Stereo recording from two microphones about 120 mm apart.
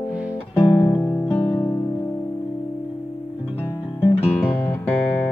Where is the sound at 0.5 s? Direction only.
40° left (ahead or behind).